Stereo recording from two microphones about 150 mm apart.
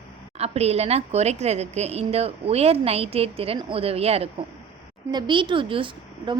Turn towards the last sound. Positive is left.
turn(degrees=-35)  # may be behind; listen again after turning